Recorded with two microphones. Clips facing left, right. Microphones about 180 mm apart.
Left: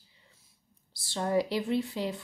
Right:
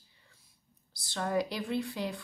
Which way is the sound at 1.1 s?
25° left (ahead or behind).